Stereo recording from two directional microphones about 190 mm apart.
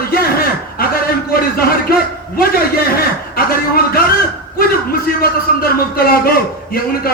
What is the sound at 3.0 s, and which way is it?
A man's voice, 50° left (ahead or behind).